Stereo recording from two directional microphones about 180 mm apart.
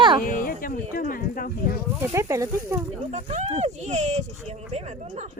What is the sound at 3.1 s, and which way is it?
Speech, 40° right (ahead or behind).